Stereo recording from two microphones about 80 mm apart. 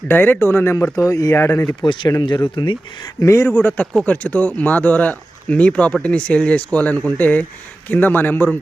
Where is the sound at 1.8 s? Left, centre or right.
Left.